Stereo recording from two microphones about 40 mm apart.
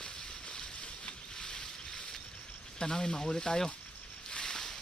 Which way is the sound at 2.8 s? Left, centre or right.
Centre.